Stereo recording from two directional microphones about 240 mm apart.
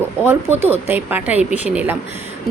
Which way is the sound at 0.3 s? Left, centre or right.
Centre.